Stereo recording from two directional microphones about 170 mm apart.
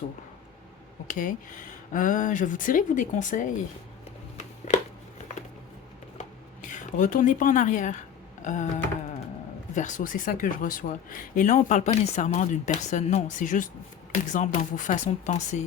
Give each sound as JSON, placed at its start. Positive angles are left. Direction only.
{"t": 1.0, "sound": "speech", "side_deg": 50}
{"t": 4.4, "sound": "a sound", "side_deg": 45}
{"t": 6.7, "sound": "speech", "side_deg": 45}